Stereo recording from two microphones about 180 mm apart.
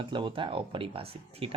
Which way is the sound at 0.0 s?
25° right (ahead or behind).